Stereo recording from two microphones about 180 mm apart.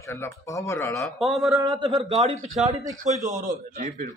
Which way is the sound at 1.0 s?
Centre (ahead or behind).